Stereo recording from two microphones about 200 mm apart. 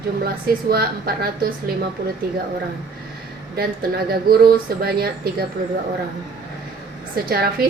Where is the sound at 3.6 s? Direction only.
50° right (ahead or behind).